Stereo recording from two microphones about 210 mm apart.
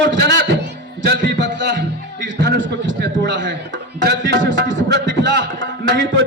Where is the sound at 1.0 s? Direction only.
50° right (ahead or behind).